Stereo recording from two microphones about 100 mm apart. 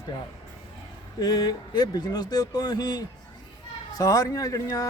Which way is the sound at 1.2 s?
40° left (ahead or behind).